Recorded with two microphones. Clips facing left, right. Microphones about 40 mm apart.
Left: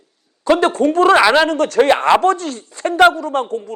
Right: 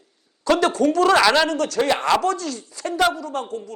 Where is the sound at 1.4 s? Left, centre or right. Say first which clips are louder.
Left 7 dB; left.